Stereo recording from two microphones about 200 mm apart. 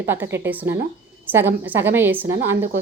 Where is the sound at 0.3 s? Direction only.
10° right (ahead or behind).